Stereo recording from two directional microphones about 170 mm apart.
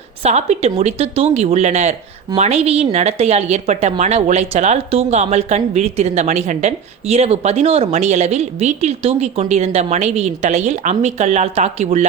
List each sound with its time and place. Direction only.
0.2 s speech: 40° right (ahead or behind)